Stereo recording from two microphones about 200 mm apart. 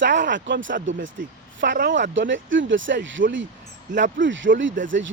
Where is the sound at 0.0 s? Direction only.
65° right (ahead or behind).